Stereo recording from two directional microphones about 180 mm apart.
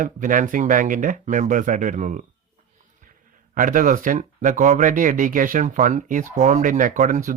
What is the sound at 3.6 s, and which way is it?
Speech, 50° right (ahead or behind).